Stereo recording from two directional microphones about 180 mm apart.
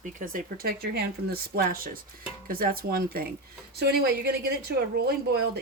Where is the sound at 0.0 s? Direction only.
50° right (ahead or behind).